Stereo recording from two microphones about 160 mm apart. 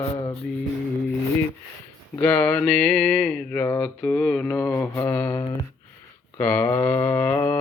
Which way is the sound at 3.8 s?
10° left (ahead or behind).